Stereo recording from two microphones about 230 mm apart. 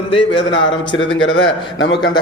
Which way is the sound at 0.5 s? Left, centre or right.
Left.